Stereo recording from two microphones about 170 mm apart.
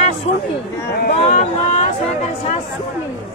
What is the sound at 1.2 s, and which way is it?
Speech, 40° left (ahead or behind).